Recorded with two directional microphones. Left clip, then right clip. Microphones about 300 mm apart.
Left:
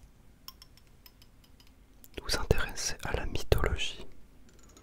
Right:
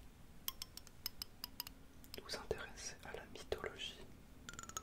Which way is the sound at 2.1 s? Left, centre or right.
Left.